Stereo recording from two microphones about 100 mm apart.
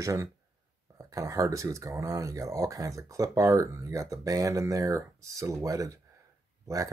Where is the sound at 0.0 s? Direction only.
35° right (ahead or behind).